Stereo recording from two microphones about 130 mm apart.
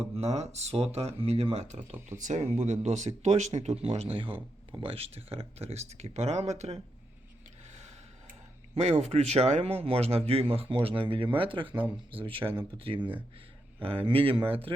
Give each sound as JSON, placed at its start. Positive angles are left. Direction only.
{"t": 0.0, "sound": "speech", "side_deg": -55}
{"t": 3.8, "sound": "speech", "side_deg": -50}
{"t": 8.7, "sound": "speech", "side_deg": -60}